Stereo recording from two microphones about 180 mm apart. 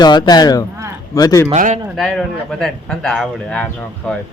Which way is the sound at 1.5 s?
45° right (ahead or behind).